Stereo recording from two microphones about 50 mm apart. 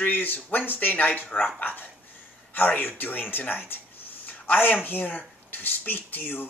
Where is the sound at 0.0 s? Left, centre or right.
Left.